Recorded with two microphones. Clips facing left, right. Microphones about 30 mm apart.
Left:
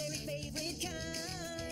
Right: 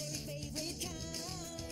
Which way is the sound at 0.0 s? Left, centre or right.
Left.